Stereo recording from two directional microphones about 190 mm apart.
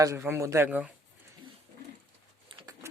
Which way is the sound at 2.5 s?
20° right (ahead or behind).